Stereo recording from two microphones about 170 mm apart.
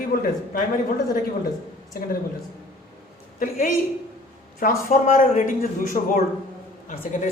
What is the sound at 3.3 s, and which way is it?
A man's voice, 55° left (ahead or behind).